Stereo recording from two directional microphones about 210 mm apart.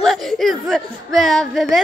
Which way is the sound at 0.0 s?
Centre (ahead or behind).